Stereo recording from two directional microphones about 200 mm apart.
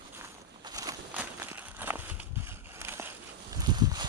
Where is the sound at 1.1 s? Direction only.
10° right (ahead or behind).